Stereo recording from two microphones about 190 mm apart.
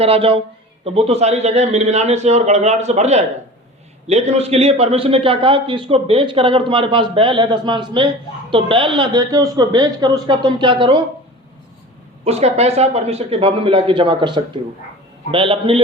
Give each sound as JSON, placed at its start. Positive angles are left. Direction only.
{"t": 0.0, "sound": "a man's voice", "side_deg": -30}
{"t": 12.2, "sound": "a man's voice", "side_deg": -35}